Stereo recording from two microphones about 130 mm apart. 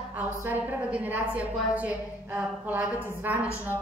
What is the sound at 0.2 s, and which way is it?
A woman's voice, 15° right (ahead or behind).